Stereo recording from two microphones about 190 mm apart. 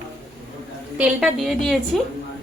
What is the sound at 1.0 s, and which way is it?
Speech, centre (ahead or behind).